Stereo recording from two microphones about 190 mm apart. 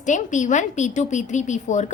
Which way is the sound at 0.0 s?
40° left (ahead or behind).